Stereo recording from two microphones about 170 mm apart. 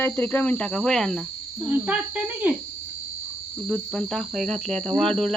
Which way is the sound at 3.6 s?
5° left (ahead or behind).